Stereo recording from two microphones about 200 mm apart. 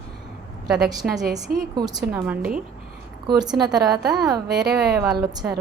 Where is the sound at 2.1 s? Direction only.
10° right (ahead or behind).